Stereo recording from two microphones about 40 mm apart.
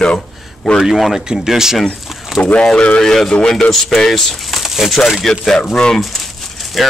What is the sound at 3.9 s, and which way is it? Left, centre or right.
Speech, centre.